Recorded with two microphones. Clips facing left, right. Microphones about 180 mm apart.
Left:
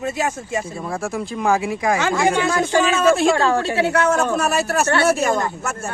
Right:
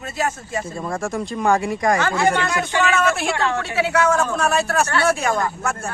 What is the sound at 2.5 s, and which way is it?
Speech, 35° left (ahead or behind).